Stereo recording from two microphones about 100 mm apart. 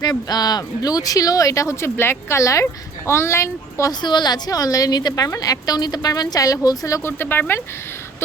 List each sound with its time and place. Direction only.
0.0 s a woman's voice: 40° left (ahead or behind)
4.0 s a woman's voice: 45° left (ahead or behind)
7.2 s a woman's voice: 20° left (ahead or behind)